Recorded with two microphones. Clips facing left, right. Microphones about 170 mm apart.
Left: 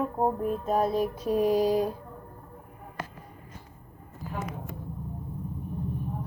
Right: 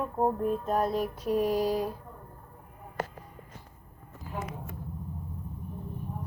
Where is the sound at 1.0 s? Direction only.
40° left (ahead or behind).